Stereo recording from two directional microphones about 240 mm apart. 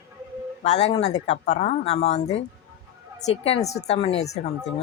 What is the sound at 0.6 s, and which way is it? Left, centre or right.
Speech, left.